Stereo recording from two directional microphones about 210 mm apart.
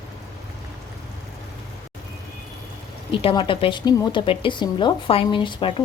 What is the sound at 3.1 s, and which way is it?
A woman's voice, 25° left (ahead or behind).